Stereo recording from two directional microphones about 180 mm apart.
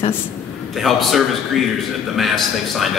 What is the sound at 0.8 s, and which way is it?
A man's voice, centre (ahead or behind).